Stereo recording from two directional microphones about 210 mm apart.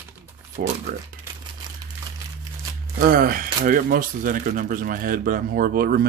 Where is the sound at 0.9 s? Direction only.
40° right (ahead or behind).